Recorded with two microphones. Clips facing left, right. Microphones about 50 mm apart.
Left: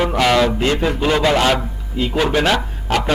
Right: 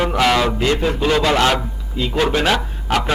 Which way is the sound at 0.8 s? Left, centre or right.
Centre.